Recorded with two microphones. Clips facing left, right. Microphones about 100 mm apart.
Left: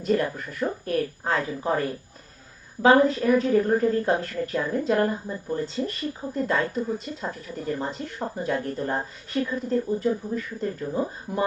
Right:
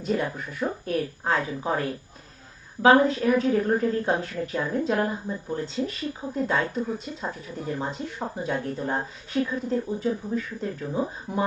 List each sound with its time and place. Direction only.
0.0 s a woman's voice: centre (ahead or behind)